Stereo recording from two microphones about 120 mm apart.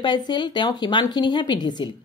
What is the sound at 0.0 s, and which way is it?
Speech, 40° left (ahead or behind).